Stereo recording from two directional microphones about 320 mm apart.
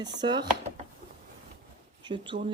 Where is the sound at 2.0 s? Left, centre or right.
Centre.